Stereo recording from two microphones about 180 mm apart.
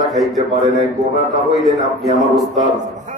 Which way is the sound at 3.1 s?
45° right (ahead or behind).